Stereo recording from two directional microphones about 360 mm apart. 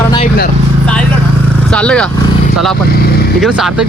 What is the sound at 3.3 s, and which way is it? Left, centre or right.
Speech, centre.